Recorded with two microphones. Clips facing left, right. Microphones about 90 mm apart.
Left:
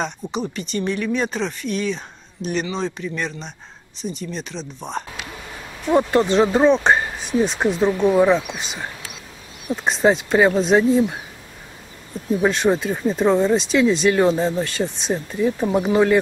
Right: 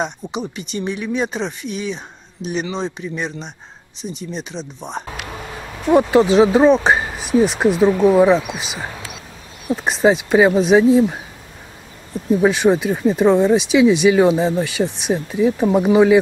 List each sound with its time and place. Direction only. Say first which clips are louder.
0.0 s speech: right 1 dB; 15° right (ahead or behind)
5.9 s speech: right 4 dB; 5° right (ahead or behind)
12.3 s speech: right 4 dB; 5° right (ahead or behind)